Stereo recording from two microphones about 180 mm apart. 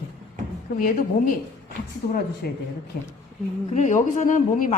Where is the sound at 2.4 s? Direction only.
60° left (ahead or behind).